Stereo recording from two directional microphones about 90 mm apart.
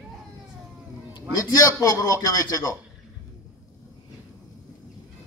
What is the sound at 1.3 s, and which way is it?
A man's voice, 40° left (ahead or behind).